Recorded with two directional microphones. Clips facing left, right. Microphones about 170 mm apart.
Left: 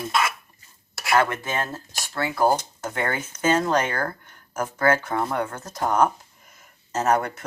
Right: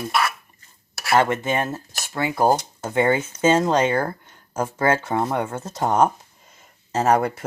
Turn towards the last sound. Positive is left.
turn(degrees=-30)  # may be behind; listen again after turning